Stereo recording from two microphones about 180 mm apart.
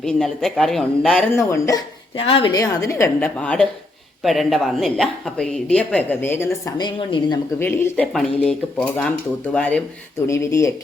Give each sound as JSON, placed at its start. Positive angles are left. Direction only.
{"t": 0.0, "sound": "speech", "side_deg": 5}
{"t": 1.4, "sound": "speech", "side_deg": 15}
{"t": 2.1, "sound": "a woman's voice", "side_deg": 30}
{"t": 2.5, "sound": "speech", "side_deg": 20}
{"t": 7.6, "sound": "speech", "side_deg": 10}